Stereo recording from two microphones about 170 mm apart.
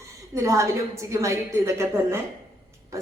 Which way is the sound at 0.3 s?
15° right (ahead or behind).